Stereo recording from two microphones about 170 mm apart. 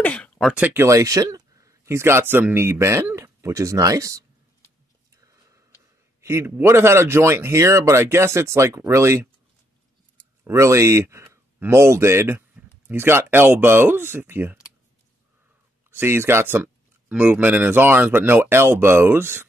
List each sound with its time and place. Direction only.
0.0 s a sound: 5° left (ahead or behind)
0.6 s speech: 15° right (ahead or behind)
6.2 s speech: 15° right (ahead or behind)
10.4 s speech: 15° right (ahead or behind)
15.9 s speech: 15° right (ahead or behind)